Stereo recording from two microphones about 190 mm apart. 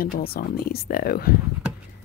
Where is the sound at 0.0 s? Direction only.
50° left (ahead or behind).